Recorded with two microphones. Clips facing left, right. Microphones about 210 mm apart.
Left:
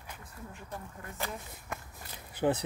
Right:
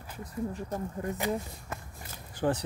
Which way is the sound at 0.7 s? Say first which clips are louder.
Right 5 dB; 40° right (ahead or behind).